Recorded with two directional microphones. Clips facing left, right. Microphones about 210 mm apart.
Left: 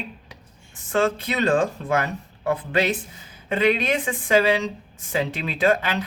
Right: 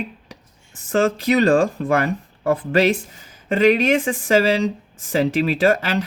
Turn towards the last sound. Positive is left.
turn(degrees=-45)  # may be behind; listen again after turning